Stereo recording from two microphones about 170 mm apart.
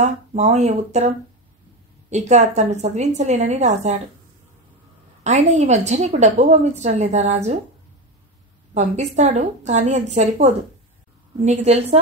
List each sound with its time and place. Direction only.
0.0 s a woman's voice: 40° right (ahead or behind)
5.2 s a woman's voice: 40° right (ahead or behind)
8.7 s a woman's voice: 40° right (ahead or behind)